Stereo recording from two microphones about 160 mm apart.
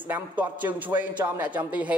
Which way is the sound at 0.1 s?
10° right (ahead or behind).